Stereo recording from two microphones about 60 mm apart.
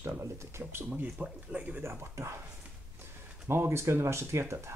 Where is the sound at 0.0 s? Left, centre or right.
Right.